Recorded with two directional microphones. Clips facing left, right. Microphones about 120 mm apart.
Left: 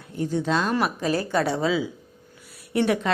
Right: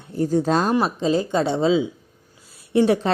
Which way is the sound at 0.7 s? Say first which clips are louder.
Right 4 dB; 20° right (ahead or behind).